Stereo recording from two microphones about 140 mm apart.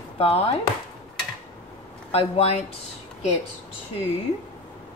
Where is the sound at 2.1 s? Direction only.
45° left (ahead or behind).